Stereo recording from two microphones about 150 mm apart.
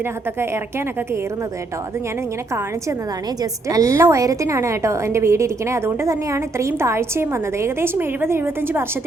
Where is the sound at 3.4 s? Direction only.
20° right (ahead or behind).